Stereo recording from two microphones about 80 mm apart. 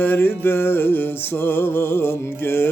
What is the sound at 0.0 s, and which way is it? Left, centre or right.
Music, left.